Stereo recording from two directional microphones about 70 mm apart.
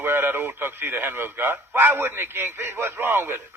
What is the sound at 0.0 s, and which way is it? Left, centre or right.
A man's voice, right.